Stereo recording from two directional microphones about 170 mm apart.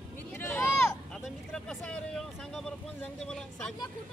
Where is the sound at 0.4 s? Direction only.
10° left (ahead or behind).